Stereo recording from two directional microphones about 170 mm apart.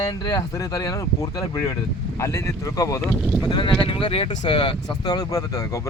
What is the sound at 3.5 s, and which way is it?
A man's voice, 25° left (ahead or behind).